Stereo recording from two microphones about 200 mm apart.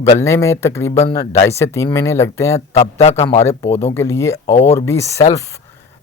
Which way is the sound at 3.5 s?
15° left (ahead or behind).